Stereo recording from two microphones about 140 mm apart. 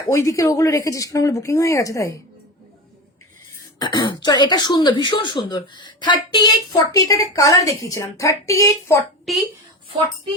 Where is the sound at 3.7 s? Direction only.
30° left (ahead or behind).